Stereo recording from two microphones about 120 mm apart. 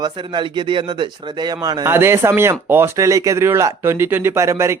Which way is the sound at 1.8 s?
20° right (ahead or behind).